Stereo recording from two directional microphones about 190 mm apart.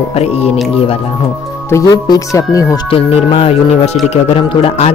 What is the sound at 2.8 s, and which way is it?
Speech, 30° left (ahead or behind).